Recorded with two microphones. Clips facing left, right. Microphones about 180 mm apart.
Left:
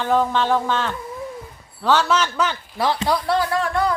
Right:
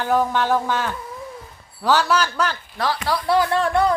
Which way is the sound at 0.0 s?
10° right (ahead or behind).